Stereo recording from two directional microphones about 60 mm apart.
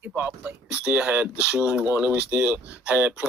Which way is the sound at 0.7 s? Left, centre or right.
Right.